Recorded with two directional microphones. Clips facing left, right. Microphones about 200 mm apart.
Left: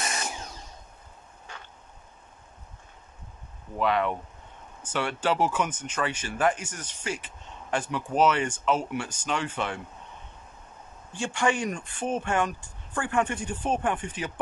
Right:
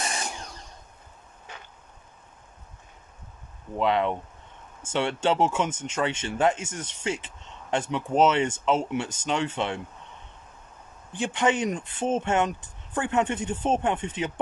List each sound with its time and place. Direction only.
3.7 s speech: 25° right (ahead or behind)
11.1 s speech: 20° right (ahead or behind)